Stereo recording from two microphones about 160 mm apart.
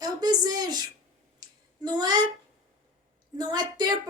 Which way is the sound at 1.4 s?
25° right (ahead or behind).